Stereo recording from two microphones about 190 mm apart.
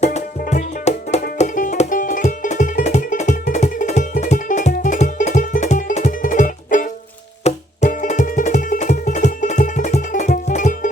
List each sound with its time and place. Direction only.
0.0 s music: 35° left (ahead or behind)